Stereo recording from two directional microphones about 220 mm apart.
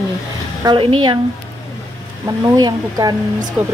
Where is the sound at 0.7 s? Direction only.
20° right (ahead or behind).